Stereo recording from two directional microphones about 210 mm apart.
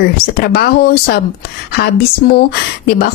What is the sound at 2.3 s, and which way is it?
Speech, 45° left (ahead or behind).